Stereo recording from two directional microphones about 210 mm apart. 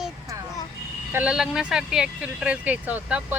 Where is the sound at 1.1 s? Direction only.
5° right (ahead or behind).